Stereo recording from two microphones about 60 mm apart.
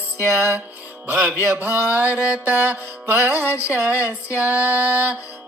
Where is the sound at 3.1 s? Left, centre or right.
Right.